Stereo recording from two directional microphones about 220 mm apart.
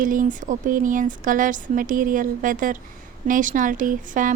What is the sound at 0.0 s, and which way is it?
A woman's voice, 35° right (ahead or behind).